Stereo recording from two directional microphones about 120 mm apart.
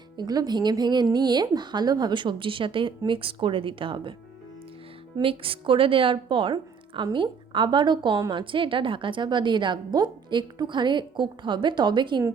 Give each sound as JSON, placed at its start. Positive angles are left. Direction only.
{"t": 0.2, "sound": "speech", "side_deg": -35}
{"t": 5.1, "sound": "speech", "side_deg": -50}